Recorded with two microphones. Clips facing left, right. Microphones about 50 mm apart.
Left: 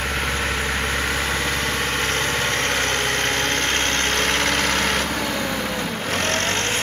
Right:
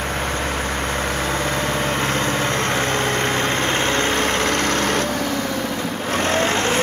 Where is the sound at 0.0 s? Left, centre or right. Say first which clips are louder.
Even; centre.